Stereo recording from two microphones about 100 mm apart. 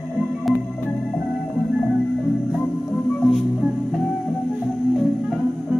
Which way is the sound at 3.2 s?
Centre (ahead or behind).